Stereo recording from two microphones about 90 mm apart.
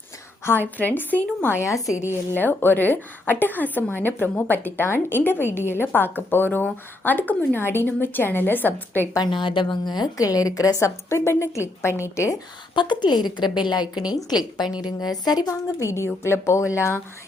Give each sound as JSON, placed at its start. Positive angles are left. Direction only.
{"t": 0.4, "sound": "a woman's voice", "side_deg": 25}
{"t": 2.3, "sound": "a woman's voice", "side_deg": 20}
{"t": 9.1, "sound": "a woman's voice", "side_deg": 60}
{"t": 12.7, "sound": "a woman's voice", "side_deg": 60}